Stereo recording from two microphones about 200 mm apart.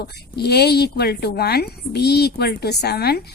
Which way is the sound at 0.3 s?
55° left (ahead or behind).